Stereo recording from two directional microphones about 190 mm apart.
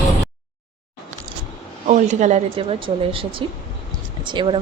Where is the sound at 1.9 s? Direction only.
40° right (ahead or behind).